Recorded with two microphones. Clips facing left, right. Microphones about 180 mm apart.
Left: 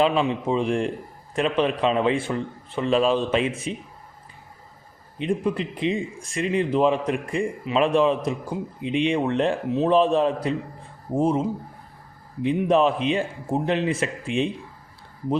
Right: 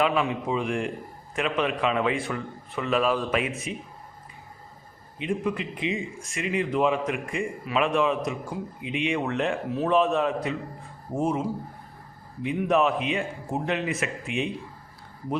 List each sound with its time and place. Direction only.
0.0 s a man's voice: 30° left (ahead or behind)
5.2 s a man's voice: 35° left (ahead or behind)